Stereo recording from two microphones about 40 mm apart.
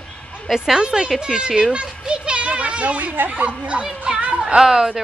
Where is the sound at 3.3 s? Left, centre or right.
Right.